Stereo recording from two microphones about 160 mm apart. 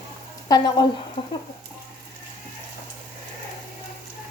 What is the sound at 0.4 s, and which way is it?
Speech, 25° left (ahead or behind).